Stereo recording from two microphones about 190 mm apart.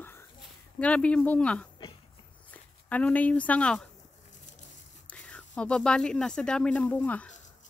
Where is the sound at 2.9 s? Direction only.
10° left (ahead or behind).